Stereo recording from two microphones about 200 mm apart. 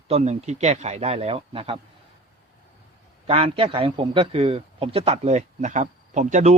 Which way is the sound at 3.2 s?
30° right (ahead or behind).